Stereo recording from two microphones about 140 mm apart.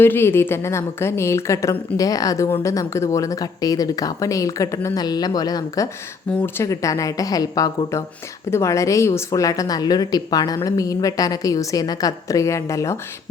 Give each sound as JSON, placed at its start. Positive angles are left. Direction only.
{"t": 0.0, "sound": "a woman's voice", "side_deg": 15}